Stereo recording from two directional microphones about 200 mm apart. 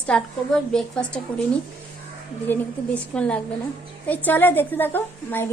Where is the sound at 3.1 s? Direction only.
5° left (ahead or behind).